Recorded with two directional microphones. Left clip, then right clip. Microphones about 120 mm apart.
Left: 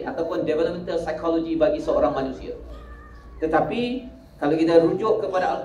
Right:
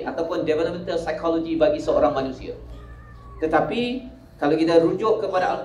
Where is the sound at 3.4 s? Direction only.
20° right (ahead or behind).